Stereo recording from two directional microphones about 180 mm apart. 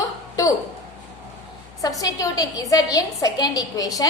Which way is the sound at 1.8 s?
20° left (ahead or behind).